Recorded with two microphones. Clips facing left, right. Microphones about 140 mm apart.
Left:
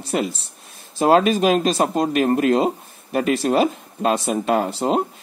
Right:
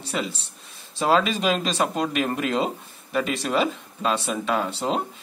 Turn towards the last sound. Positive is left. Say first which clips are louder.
# left 5 dB
turn(degrees=45)  # may be behind; listen again after turning